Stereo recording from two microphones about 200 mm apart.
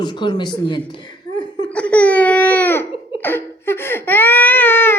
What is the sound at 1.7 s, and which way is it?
Baby cry, 5° left (ahead or behind).